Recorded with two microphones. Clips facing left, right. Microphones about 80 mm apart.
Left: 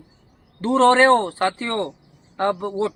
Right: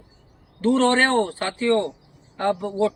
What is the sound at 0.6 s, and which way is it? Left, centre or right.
A man's voice, left.